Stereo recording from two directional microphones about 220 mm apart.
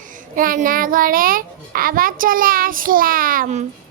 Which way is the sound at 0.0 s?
35° right (ahead or behind).